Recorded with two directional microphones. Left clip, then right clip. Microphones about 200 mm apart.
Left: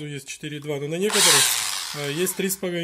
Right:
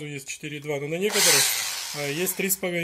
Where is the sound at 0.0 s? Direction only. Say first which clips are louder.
Left 1 dB; 50° left (ahead or behind).